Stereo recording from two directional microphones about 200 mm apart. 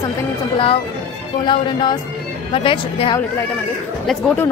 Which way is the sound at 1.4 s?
25° left (ahead or behind).